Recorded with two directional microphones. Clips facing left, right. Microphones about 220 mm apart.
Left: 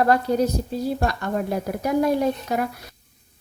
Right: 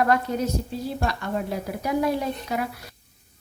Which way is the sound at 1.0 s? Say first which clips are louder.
Left 3 dB; 45° left (ahead or behind).